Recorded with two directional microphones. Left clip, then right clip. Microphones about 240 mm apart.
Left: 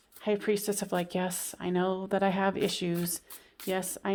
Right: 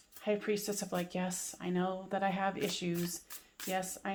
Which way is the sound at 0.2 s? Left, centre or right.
Left.